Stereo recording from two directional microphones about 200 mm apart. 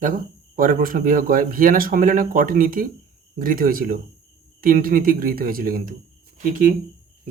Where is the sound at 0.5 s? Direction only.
45° right (ahead or behind).